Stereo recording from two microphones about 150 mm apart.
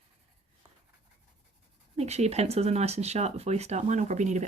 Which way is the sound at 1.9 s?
45° right (ahead or behind).